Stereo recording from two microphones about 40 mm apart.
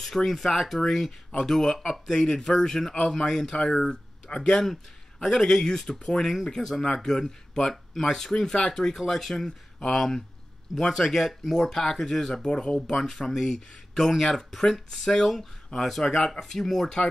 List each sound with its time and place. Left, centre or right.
0.0 s speech: centre